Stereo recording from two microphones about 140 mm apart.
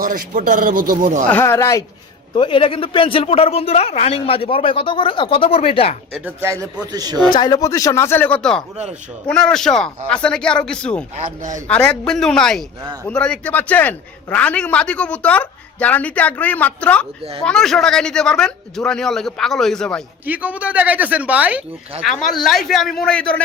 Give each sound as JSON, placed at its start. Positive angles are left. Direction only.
{"t": 0.0, "sound": "speech", "side_deg": -65}
{"t": 1.3, "sound": "a man's voice", "side_deg": 15}
{"t": 2.3, "sound": "speech", "side_deg": 40}
{"t": 6.2, "sound": "speech", "side_deg": -20}
{"t": 7.3, "sound": "a man's voice", "side_deg": 30}
{"t": 11.1, "sound": "a man's voice", "side_deg": -60}
{"t": 11.7, "sound": "a man's voice", "side_deg": 5}
{"t": 20.2, "sound": "speech", "side_deg": -10}
{"t": 22.0, "sound": "speech", "side_deg": 0}